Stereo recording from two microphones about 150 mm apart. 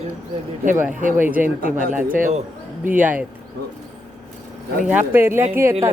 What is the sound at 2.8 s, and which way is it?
Speech, 10° right (ahead or behind).